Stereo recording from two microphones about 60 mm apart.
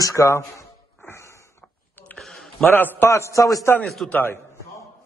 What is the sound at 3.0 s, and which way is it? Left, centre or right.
Speech, left.